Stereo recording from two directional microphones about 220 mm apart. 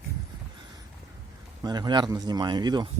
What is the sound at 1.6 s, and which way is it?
Speech, 20° right (ahead or behind).